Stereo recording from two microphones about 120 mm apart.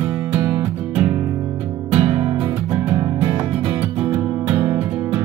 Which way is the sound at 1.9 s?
40° right (ahead or behind).